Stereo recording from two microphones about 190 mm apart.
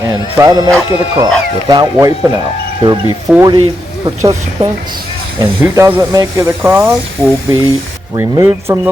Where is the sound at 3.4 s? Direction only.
25° right (ahead or behind).